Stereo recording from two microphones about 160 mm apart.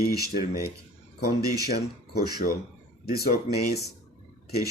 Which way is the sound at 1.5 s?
75° left (ahead or behind).